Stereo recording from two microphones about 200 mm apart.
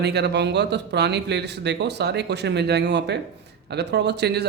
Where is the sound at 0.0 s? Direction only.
55° right (ahead or behind).